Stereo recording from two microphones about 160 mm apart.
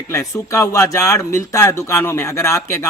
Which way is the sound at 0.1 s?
15° left (ahead or behind).